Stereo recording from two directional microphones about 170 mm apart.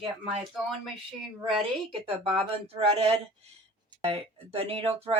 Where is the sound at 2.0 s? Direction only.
35° right (ahead or behind).